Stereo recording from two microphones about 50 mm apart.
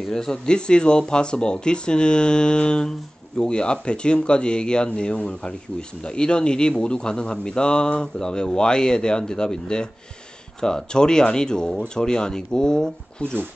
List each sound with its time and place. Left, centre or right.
0.1 s speech: centre